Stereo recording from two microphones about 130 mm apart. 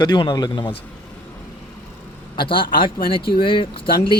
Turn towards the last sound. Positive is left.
turn(degrees=40)  # may be behind; listen again after turning